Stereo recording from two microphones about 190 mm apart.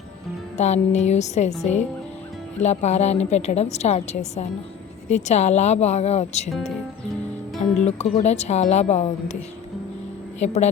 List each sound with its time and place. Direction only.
0.5 s a woman's voice: 35° left (ahead or behind)
2.6 s a woman's voice: 35° left (ahead or behind)
6.5 s speech: centre (ahead or behind)
7.9 s a woman's voice: 35° left (ahead or behind)
10.4 s a woman's voice: 35° left (ahead or behind)